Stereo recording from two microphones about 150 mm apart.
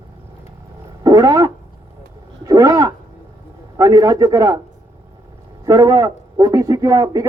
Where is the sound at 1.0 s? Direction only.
25° right (ahead or behind).